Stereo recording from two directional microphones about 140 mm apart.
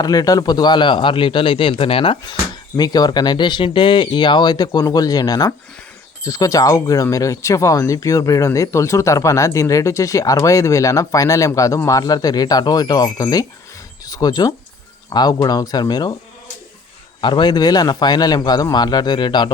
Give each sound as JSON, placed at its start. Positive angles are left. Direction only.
{"t": 0.0, "sound": "speech", "side_deg": 25}
{"t": 2.7, "sound": "speech", "side_deg": 30}
{"t": 17.2, "sound": "speech", "side_deg": 35}